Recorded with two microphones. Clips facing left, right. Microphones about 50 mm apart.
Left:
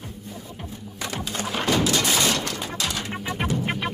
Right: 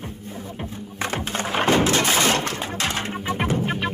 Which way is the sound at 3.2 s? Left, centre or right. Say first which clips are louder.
Right 3 dB; right.